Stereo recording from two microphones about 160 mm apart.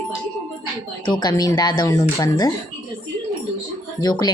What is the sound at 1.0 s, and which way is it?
Speech, 30° left (ahead or behind).